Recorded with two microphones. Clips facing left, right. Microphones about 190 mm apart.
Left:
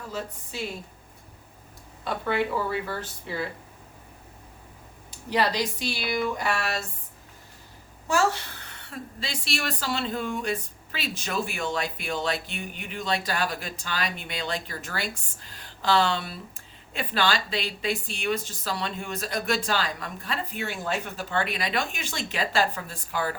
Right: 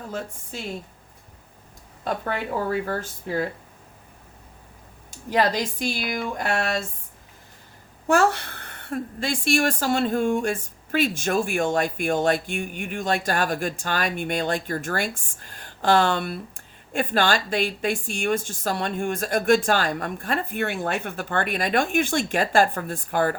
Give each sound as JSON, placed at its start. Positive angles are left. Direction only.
{"t": 0.1, "sound": "a woman's voice", "side_deg": -50}
{"t": 2.0, "sound": "a woman's voice", "side_deg": -45}
{"t": 5.3, "sound": "a woman's voice", "side_deg": -45}
{"t": 8.0, "sound": "a woman's voice", "side_deg": -55}